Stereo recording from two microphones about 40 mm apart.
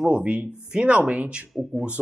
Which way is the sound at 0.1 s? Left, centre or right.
Right.